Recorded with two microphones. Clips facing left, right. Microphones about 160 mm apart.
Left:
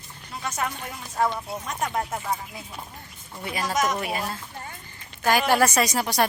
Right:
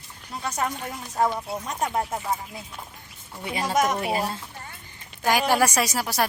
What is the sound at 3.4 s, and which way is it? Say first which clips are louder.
Speech: right 2 dB; 25° right (ahead or behind).